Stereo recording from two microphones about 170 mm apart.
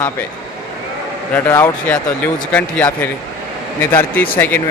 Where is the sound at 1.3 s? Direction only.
15° left (ahead or behind).